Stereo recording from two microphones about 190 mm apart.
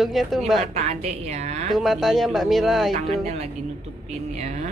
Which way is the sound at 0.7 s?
35° right (ahead or behind).